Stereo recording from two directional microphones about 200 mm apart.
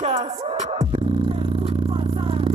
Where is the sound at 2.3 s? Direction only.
25° right (ahead or behind).